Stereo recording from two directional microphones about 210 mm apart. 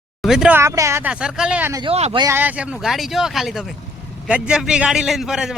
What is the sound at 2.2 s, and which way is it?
A man's voice, 10° right (ahead or behind).